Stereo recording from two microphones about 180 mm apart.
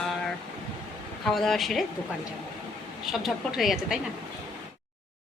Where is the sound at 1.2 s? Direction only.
Centre (ahead or behind).